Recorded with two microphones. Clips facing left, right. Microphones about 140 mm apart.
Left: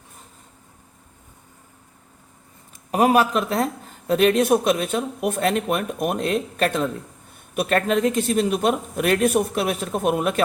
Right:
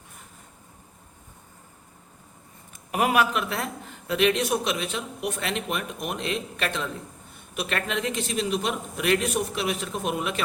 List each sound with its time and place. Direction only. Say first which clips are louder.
2.9 s a man's voice: left 5 dB; 35° left (ahead or behind)